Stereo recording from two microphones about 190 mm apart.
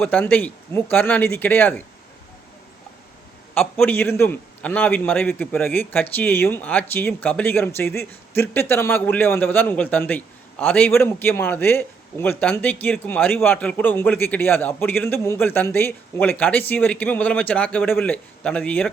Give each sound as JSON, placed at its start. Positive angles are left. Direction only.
{"t": 0.0, "sound": "a man's voice", "side_deg": 10}
{"t": 3.5, "sound": "a man's voice", "side_deg": 10}